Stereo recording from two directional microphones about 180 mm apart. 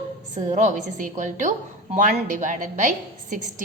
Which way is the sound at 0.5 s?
40° right (ahead or behind).